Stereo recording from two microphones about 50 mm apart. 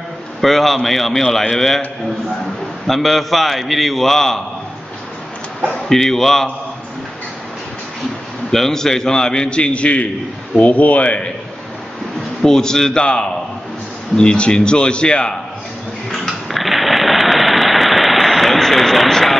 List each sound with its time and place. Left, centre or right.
0.4 s a man's voice: centre
2.9 s a man's voice: centre
5.7 s a man's voice: centre
8.5 s a man's voice: centre
12.4 s a man's voice: centre
16.1 s sewing machine: centre